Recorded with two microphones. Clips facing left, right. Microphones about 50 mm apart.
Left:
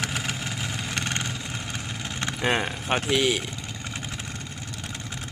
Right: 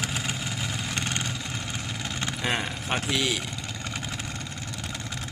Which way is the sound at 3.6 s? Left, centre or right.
Centre.